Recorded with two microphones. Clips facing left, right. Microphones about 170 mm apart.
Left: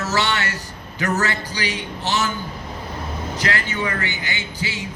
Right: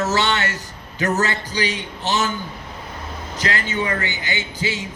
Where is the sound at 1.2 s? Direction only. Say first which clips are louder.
Right 2 dB; 20° right (ahead or behind).